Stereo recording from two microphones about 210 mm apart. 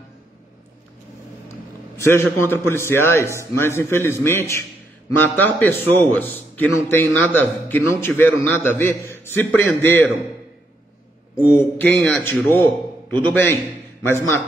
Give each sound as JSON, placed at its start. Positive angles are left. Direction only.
{"t": 2.0, "sound": "a man's voice", "side_deg": 10}
{"t": 11.4, "sound": "a man's voice", "side_deg": 10}